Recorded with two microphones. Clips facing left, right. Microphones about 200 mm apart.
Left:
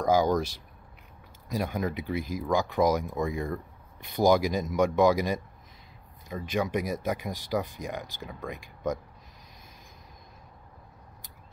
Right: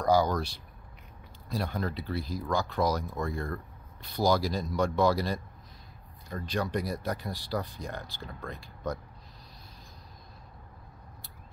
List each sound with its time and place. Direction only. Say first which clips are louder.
0.0 s speech: left 2 dB; 15° left (ahead or behind)
1.5 s speech: left 3 dB; 15° left (ahead or behind)